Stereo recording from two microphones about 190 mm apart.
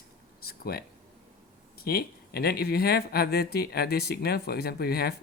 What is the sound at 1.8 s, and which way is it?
Speech, 55° left (ahead or behind).